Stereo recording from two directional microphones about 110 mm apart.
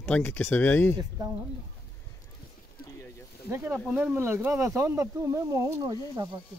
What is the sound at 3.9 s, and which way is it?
Speech, 10° right (ahead or behind).